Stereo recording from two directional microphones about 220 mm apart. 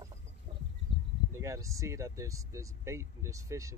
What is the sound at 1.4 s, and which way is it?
Speech, 15° right (ahead or behind).